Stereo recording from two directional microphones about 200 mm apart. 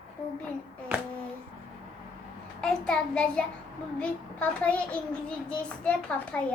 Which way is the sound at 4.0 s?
5° left (ahead or behind).